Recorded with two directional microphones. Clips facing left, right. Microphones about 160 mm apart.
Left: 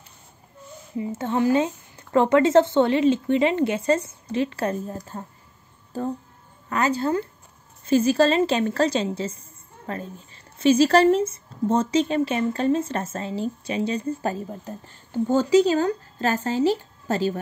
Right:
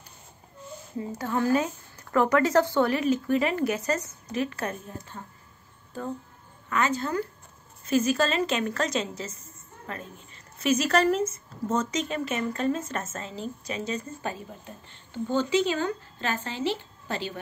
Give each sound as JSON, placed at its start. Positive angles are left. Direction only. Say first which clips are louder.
{"t": 0.9, "sound": "speech", "louder": "left 4 dB", "side_deg": 25}
{"t": 6.7, "sound": "speech", "louder": "left 4 dB", "side_deg": 35}